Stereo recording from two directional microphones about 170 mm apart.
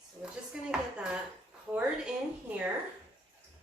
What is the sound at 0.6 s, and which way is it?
Speech, 5° right (ahead or behind).